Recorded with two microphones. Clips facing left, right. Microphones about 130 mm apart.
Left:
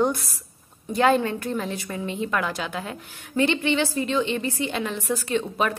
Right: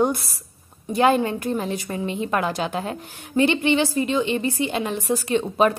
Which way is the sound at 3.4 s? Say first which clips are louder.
Right 3 dB; 15° right (ahead or behind).